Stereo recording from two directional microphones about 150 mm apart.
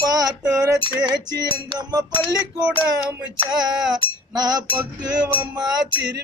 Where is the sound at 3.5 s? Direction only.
30° right (ahead or behind).